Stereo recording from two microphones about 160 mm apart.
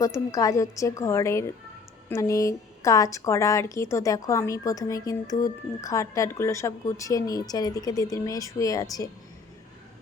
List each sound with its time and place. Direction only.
0.0 s a woman's voice: 20° left (ahead or behind)